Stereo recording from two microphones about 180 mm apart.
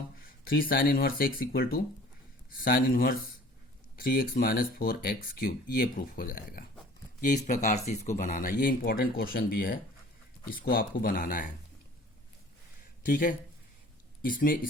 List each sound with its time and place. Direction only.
0.4 s speech: 55° left (ahead or behind)
13.1 s speech: 50° left (ahead or behind)